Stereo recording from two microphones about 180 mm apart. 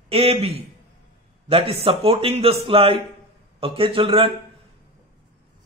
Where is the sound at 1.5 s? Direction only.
30° right (ahead or behind).